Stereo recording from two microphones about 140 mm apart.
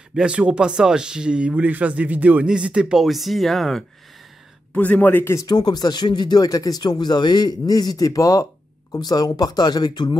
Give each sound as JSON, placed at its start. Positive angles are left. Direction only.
{"t": 0.1, "sound": "a man's voice", "side_deg": -5}
{"t": 5.5, "sound": "speech", "side_deg": 30}